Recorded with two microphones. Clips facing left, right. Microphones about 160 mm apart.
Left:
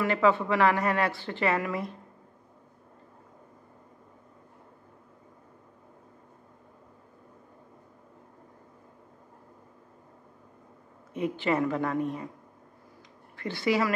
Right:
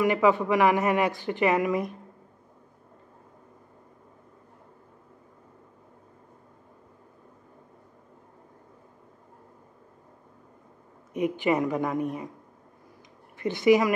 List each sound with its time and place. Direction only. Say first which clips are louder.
0.0 s a woman's voice: right 2 dB; 15° right (ahead or behind)
11.1 s a woman's voice: right 3 dB; 15° right (ahead or behind)
13.4 s a woman's voice: right 6 dB; 20° right (ahead or behind)